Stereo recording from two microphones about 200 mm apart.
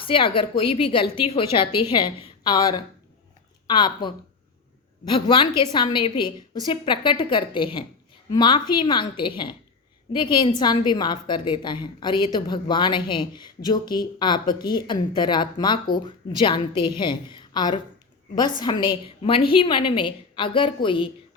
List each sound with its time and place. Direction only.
0.0 s a woman's voice: 25° left (ahead or behind)